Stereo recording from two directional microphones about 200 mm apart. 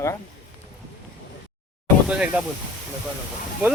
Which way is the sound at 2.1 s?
5° right (ahead or behind).